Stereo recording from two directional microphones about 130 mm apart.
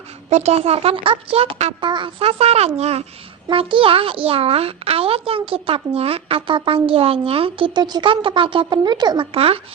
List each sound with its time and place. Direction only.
0.3 s a child's voice: 60° right (ahead or behind)
1.8 s a child's voice: 40° right (ahead or behind); by 3.1 s 55° right (ahead or behind)
3.5 s a child's voice: 40° right (ahead or behind)